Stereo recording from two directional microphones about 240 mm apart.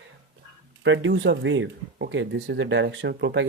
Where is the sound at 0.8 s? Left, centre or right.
Right.